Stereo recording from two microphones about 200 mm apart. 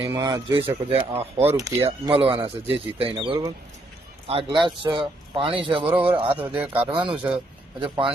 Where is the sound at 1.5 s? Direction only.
15° right (ahead or behind).